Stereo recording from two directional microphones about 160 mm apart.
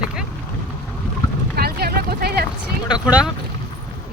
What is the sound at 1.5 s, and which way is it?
Vehicle, 75° right (ahead or behind).